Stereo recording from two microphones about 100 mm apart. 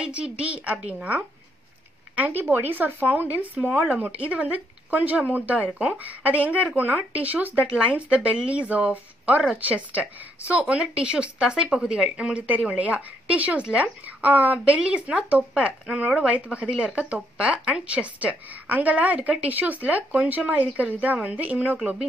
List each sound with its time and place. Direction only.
0.0 s a woman's voice: 10° right (ahead or behind)